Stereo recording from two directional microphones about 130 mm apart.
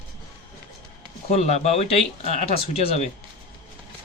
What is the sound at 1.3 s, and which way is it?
Speech, 55° left (ahead or behind).